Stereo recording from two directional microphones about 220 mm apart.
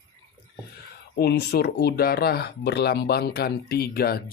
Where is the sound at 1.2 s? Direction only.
45° left (ahead or behind).